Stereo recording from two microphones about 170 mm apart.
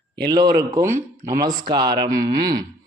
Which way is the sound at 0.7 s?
15° right (ahead or behind).